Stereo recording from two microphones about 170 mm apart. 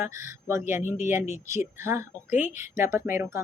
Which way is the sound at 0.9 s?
45° left (ahead or behind).